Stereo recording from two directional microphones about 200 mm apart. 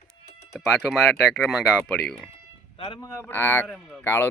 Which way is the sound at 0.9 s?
Centre (ahead or behind).